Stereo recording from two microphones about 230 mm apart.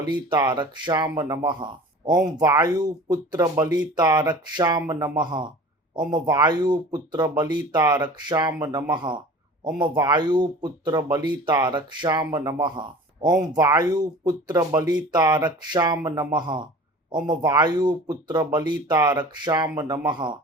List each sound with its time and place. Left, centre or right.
0.0 s speech: centre